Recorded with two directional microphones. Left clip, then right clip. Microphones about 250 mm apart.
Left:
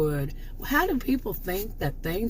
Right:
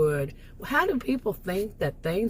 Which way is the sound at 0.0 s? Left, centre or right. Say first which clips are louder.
Right 3 dB; centre.